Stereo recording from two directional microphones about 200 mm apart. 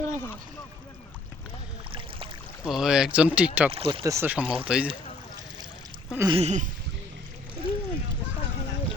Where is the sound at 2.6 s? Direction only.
5° right (ahead or behind).